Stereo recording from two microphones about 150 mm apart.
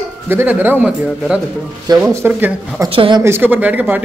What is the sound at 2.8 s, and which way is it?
Speech, 35° right (ahead or behind).